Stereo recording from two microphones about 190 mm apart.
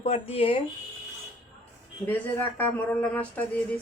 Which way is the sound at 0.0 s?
30° left (ahead or behind).